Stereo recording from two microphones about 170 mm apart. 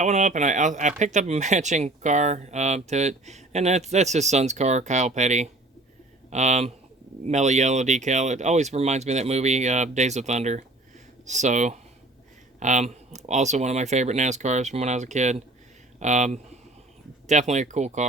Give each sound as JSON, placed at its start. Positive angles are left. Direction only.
{"t": 0.0, "sound": "speech", "side_deg": -45}